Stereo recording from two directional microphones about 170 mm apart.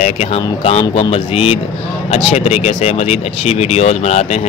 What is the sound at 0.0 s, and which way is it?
Speech, 40° left (ahead or behind).